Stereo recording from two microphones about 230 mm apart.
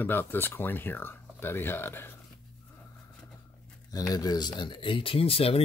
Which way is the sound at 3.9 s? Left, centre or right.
Centre.